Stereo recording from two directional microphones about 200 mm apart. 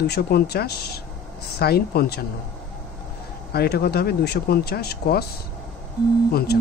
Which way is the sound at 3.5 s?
50° left (ahead or behind).